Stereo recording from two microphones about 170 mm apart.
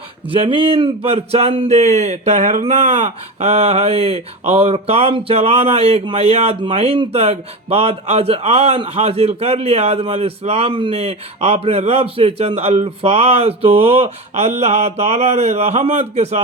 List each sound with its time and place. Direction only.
0.3 s speech: 30° right (ahead or behind)